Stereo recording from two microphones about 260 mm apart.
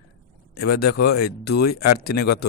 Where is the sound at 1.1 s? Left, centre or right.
Left.